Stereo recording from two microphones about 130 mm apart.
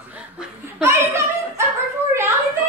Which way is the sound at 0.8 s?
20° right (ahead or behind).